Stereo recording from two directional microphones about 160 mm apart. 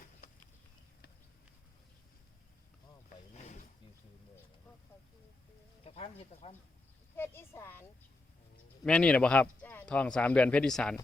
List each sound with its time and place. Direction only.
3.3 s wild animals: 50° left (ahead or behind)
5.8 s speech: 40° left (ahead or behind)
7.2 s speech: 15° left (ahead or behind)